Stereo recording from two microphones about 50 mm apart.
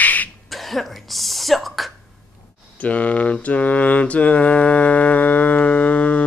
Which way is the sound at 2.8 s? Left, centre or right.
Left.